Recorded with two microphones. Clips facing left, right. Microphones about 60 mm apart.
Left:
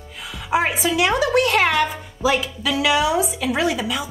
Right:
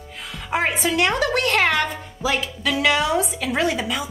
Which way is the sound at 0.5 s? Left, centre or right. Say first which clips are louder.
Left 2 dB; centre.